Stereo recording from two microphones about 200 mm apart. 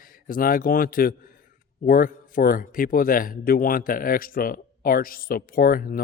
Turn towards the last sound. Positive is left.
turn(degrees=45)  # may be behind; listen again after turning